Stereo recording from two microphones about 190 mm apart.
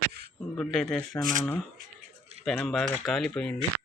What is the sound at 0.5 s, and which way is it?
Speech, centre (ahead or behind).